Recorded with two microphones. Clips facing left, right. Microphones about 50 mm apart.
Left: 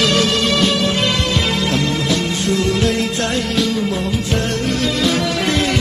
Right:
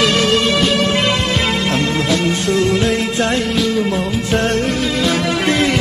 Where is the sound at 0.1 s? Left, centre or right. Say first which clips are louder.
Right 2 dB; right.